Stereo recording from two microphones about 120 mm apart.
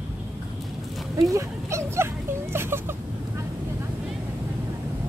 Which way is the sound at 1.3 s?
25° right (ahead or behind).